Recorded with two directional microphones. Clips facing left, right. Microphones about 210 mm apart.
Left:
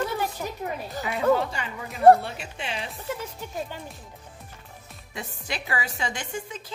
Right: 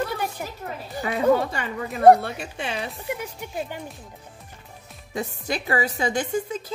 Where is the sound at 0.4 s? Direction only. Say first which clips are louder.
Left 1 dB; 15° right (ahead or behind).